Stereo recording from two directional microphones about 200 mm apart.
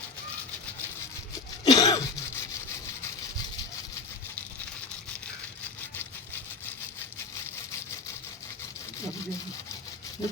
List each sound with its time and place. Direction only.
1.6 s cough: 20° left (ahead or behind)